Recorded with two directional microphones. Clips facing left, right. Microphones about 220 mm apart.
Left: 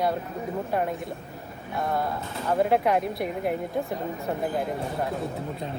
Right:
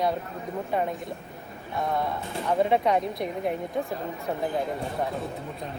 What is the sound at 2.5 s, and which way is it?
A woman's voice, 5° left (ahead or behind).